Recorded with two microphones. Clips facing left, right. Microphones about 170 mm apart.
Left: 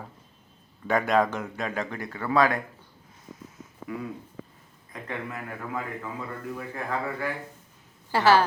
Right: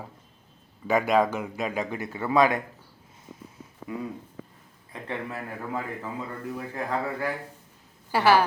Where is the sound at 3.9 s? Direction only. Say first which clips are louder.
Right 1 dB; 30° right (ahead or behind).